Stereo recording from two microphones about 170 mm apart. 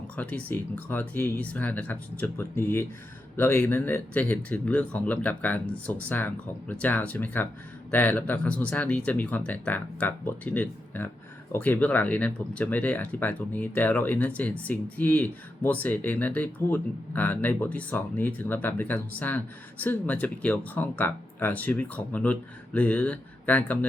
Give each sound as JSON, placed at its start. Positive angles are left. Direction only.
{"t": 0.2, "sound": "speech", "side_deg": 10}